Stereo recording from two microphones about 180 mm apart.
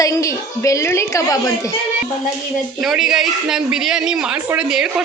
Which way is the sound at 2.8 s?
Centre (ahead or behind).